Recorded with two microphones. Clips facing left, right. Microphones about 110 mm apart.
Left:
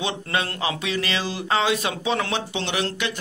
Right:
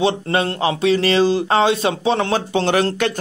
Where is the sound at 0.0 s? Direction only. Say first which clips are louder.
Right 8 dB; 35° right (ahead or behind).